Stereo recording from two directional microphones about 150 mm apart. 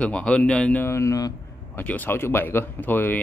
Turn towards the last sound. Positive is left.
turn(degrees=15)  # may be behind; listen again after turning